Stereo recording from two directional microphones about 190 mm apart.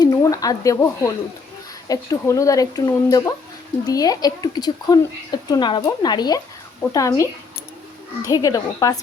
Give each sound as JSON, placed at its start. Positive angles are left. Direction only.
{"t": 0.0, "sound": "speech", "side_deg": 20}